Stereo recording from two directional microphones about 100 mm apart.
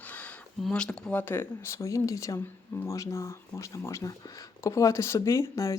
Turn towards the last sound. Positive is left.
turn(degrees=30)  # may be behind; listen again after turning